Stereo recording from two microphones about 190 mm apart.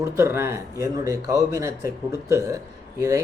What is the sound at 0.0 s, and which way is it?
Speech, 15° right (ahead or behind).